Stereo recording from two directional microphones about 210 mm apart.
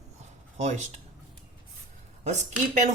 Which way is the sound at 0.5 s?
35° right (ahead or behind).